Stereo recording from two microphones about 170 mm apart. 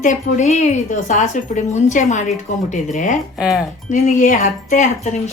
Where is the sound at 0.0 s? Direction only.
45° left (ahead or behind).